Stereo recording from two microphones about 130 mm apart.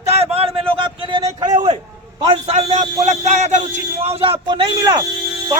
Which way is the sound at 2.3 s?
55° right (ahead or behind).